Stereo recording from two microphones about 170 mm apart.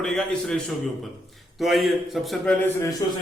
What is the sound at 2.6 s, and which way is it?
Speech, 20° left (ahead or behind).